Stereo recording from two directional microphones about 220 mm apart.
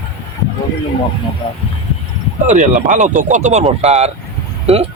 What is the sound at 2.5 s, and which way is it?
Speech, 35° right (ahead or behind).